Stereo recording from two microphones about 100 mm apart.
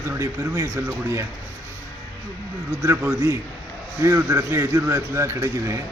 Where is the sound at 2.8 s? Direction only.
25° right (ahead or behind).